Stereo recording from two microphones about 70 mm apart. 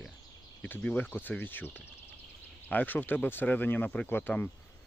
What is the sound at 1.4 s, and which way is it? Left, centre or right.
Speech, left.